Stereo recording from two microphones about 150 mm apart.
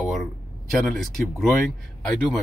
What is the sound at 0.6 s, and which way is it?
Speech, centre (ahead or behind).